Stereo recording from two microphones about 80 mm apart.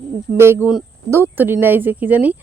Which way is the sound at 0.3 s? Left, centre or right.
Right.